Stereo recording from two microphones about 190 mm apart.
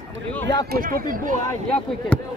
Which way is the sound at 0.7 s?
50° right (ahead or behind).